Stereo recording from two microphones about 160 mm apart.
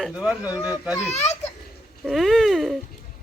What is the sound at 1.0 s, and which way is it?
Speech, 45° left (ahead or behind).